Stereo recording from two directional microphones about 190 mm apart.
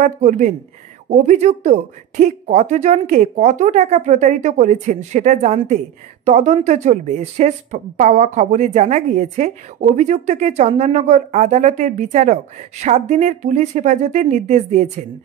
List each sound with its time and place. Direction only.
0.0 s speech: 40° right (ahead or behind)